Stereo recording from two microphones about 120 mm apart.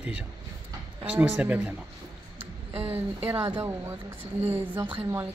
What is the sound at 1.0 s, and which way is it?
Speech, 10° right (ahead or behind).